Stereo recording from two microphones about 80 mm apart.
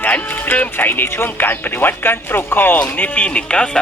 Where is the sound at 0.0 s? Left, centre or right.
Left.